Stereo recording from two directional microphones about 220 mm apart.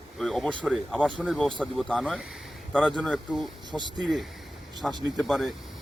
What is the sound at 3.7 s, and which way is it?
Speech, 20° right (ahead or behind).